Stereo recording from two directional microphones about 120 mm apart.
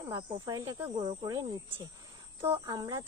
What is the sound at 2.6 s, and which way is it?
Speech, 35° right (ahead or behind).